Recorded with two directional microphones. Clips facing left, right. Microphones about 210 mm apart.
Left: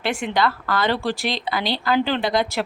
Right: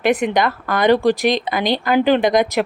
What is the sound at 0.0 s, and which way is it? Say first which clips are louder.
A woman's voice: right 6 dB; 20° right (ahead or behind).